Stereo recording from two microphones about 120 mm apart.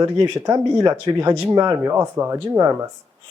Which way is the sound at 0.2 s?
25° right (ahead or behind).